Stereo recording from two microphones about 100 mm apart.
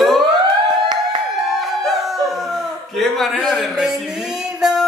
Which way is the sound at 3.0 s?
Centre (ahead or behind).